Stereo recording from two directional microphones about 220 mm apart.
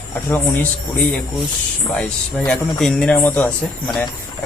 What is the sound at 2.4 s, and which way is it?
Speech, 5° left (ahead or behind).